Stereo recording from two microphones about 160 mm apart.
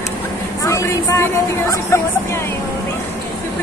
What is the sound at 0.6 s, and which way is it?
Speech, 20° left (ahead or behind).